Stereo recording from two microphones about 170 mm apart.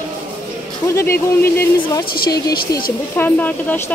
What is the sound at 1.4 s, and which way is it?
Speech, 15° left (ahead or behind).